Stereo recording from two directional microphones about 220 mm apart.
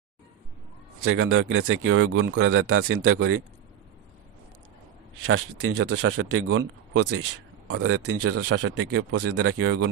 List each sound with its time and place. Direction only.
1.0 s speech: 65° right (ahead or behind)
5.2 s speech: 75° right (ahead or behind); by 8.7 s 90° right
8.7 s speech: 80° right